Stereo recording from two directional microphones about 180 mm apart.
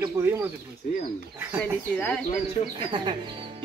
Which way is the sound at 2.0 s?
10° left (ahead or behind).